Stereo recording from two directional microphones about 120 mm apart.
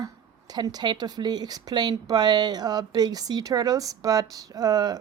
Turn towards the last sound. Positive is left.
turn(degrees=-35)  # may be behind; listen again after turning